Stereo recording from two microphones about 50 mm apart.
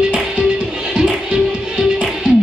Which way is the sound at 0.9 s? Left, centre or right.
Centre.